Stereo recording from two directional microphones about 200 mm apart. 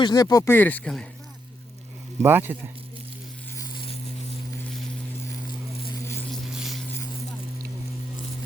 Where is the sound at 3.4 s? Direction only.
15° left (ahead or behind).